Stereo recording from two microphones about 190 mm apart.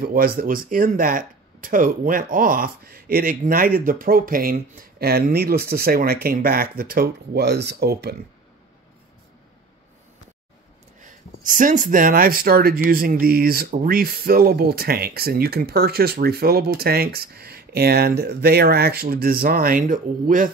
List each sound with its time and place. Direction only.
0.0 s speech: 50° right (ahead or behind)
11.0 s speech: 40° right (ahead or behind)